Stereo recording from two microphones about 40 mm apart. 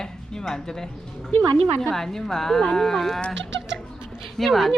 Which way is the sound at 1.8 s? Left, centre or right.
Centre.